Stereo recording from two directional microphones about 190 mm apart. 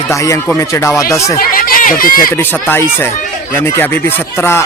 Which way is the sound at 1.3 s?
50° left (ahead or behind).